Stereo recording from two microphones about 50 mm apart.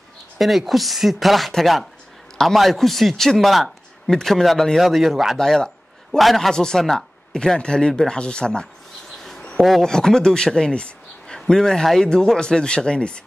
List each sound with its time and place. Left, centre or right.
0.4 s a man's voice: centre
5.4 s a man's voice: centre
6.5 s speech: centre
6.8 s a man's voice: centre
7.3 s speech: centre
9.6 s speech: centre